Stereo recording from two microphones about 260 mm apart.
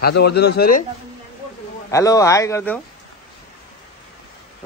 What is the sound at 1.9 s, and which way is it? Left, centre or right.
Speech, centre.